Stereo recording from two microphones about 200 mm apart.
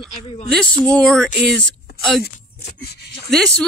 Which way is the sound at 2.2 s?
50° left (ahead or behind).